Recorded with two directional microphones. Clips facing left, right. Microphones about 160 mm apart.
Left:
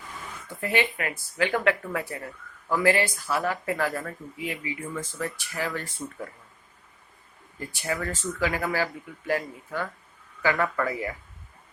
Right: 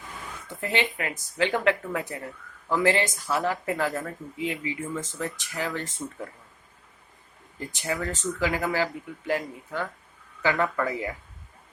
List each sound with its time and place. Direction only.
0.4 s speech: 20° right (ahead or behind)
7.6 s speech: 20° right (ahead or behind)